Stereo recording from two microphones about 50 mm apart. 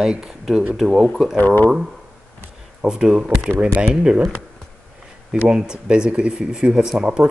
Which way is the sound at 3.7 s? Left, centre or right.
Centre.